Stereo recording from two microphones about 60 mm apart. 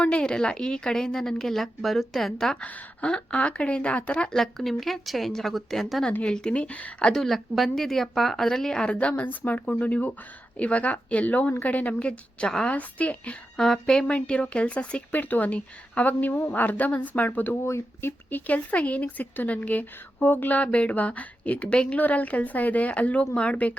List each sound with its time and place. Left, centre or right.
0.0 s speech: centre
2.6 s speech: centre
6.2 s speech: centre
7.1 s speech: centre; by 13.3 s left
13.6 s speech: centre; by 17.6 s left
17.6 s speech: left
18.3 s speech: left